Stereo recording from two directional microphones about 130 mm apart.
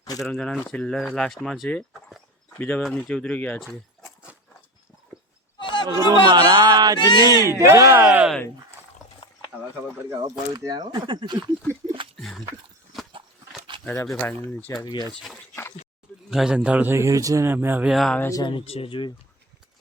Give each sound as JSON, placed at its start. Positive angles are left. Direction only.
{"t": 0.2, "sound": "speech", "side_deg": 5}
{"t": 5.5, "sound": "chatter", "side_deg": 40}
{"t": 6.1, "sound": "speech", "side_deg": -35}
{"t": 7.0, "sound": "speech", "side_deg": 35}
{"t": 7.4, "sound": "speech", "side_deg": -20}
{"t": 10.1, "sound": "speech", "side_deg": -30}
{"t": 12.1, "sound": "dog", "side_deg": 0}
{"t": 13.7, "sound": "a sound", "side_deg": -40}
{"t": 14.4, "sound": "speech", "side_deg": 15}
{"t": 14.7, "sound": "speech", "side_deg": 35}
{"t": 15.1, "sound": "a man's voice", "side_deg": 0}
{"t": 17.9, "sound": "speech", "side_deg": 0}
{"t": 18.2, "sound": "speech", "side_deg": 25}
{"t": 18.4, "sound": "speech", "side_deg": 45}